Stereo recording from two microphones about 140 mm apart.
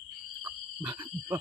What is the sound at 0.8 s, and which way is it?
Wild animals, 10° right (ahead or behind).